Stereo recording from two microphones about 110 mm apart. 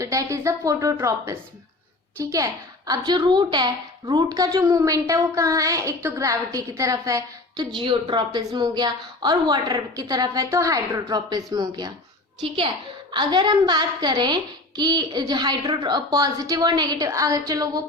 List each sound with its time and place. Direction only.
0.0 s a woman's voice: 30° right (ahead or behind)
12.4 s a woman's voice: 50° right (ahead or behind)